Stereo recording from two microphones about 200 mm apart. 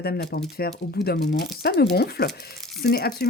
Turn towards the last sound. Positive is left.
turn(degrees=55)  # may be behind; listen again after turning